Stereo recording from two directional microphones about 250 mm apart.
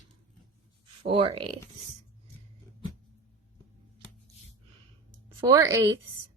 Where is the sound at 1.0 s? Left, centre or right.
Right.